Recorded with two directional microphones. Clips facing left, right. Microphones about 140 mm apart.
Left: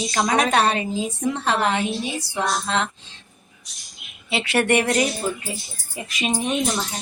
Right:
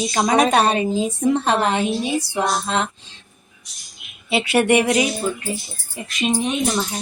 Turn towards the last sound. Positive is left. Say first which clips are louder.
# right 2 dB
turn(degrees=0)  # may be behind; listen again after turning